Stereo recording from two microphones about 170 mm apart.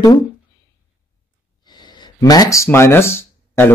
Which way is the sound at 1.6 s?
25° left (ahead or behind).